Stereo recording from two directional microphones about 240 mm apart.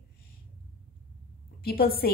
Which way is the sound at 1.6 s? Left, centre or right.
Left.